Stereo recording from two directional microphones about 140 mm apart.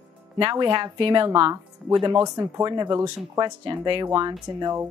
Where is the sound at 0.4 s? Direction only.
35° right (ahead or behind).